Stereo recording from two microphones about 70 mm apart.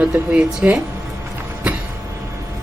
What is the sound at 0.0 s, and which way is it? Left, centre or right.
Speech, centre.